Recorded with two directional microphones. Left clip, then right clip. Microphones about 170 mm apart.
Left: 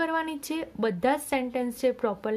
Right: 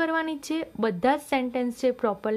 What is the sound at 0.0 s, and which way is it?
A woman's voice, 15° right (ahead or behind).